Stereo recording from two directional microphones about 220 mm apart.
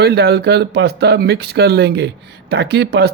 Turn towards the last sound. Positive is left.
turn(degrees=-50)  # may be behind; listen again after turning